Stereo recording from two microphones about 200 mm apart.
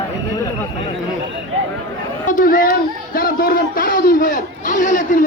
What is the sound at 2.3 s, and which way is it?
Speech, 45° left (ahead or behind).